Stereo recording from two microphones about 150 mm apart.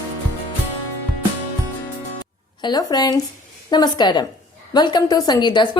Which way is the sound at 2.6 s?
30° left (ahead or behind).